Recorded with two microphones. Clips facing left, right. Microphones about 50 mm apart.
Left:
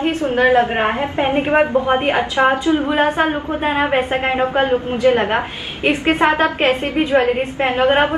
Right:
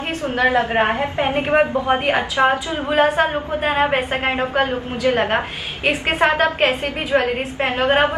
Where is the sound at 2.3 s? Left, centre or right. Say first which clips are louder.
Left 3 dB; left.